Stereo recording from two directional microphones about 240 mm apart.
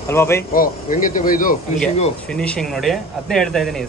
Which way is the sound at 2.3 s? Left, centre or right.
Centre.